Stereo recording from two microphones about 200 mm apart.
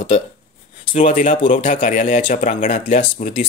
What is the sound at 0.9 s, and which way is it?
Speech, 40° left (ahead or behind).